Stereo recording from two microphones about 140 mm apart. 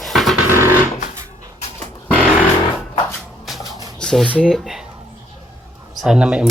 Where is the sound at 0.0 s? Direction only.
Centre (ahead or behind).